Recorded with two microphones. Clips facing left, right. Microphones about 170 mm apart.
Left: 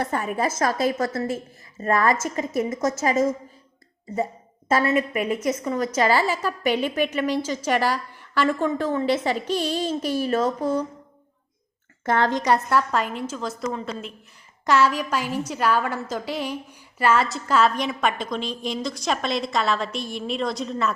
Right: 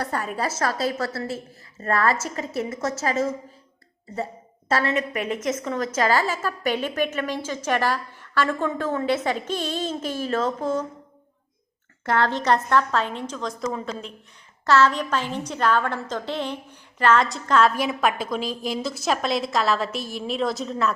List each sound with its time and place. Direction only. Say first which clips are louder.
0.0 s a woman's voice: left 2 dB; 20° left (ahead or behind)
4.7 s a woman's voice: left 3 dB; 10° left (ahead or behind)
12.0 s a woman's voice: left 1 dB; 20° left (ahead or behind); by 13.9 s centre (ahead or behind)
14.7 s a woman's voice: right 1 dB; 10° left (ahead or behind)